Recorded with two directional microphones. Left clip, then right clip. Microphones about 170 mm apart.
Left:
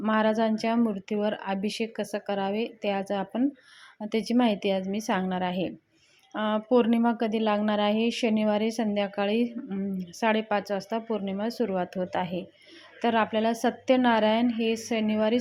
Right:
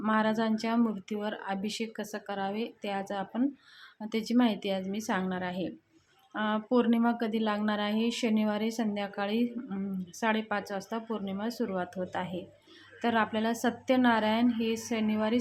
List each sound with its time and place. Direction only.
0.0 s a woman's voice: 15° left (ahead or behind)